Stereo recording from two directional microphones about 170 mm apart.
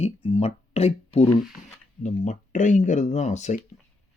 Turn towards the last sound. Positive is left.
turn(degrees=45)  # may be behind; listen again after turning